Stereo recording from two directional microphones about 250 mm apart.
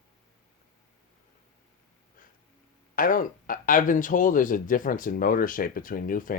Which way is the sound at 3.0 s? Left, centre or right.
Left.